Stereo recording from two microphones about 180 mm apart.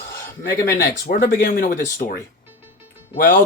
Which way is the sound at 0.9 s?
55° left (ahead or behind).